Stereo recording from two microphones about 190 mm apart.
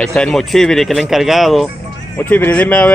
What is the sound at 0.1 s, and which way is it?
Speech, 5° left (ahead or behind).